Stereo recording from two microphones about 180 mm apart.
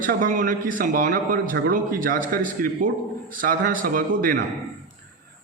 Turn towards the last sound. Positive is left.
turn(degrees=-50)  # may be behind; listen again after turning